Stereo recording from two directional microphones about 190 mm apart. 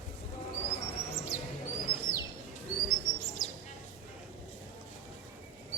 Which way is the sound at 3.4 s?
Centre (ahead or behind).